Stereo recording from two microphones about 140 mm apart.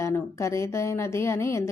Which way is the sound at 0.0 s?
20° left (ahead or behind).